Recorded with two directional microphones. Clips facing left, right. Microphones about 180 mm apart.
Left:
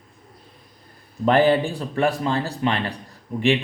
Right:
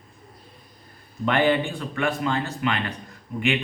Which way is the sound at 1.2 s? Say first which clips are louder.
Left 4 dB; 35° left (ahead or behind).